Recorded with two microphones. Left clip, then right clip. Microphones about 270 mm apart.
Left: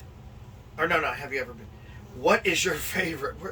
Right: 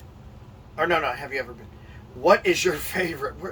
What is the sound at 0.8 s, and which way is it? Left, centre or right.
Speech, centre.